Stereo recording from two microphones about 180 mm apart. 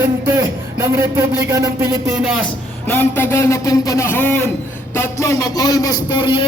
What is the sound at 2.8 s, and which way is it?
A man's voice, 10° left (ahead or behind).